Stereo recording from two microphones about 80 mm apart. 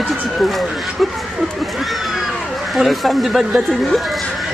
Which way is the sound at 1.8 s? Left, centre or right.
Centre.